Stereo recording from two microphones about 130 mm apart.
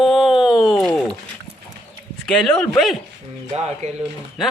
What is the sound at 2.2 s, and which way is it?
Speech, 5° left (ahead or behind).